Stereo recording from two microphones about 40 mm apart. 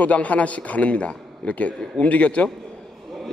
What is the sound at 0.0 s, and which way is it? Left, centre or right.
A man's voice, left.